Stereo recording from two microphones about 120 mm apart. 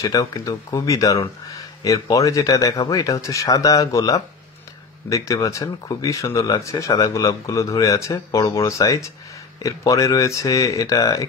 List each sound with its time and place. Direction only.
0.0 s speech: 30° left (ahead or behind)